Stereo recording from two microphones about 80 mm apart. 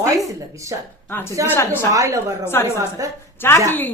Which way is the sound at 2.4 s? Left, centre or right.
Left.